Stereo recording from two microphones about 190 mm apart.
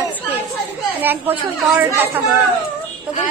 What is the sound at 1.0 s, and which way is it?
Speech, 10° right (ahead or behind).